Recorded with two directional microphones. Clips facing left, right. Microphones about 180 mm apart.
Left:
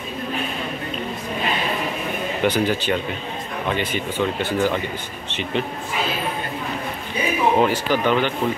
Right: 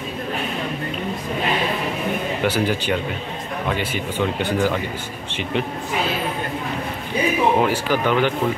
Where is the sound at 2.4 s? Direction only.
10° right (ahead or behind).